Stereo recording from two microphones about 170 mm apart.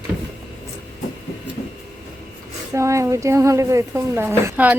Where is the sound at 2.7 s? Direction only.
15° right (ahead or behind).